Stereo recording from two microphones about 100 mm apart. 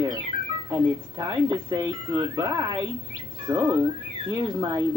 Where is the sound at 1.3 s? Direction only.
40° right (ahead or behind).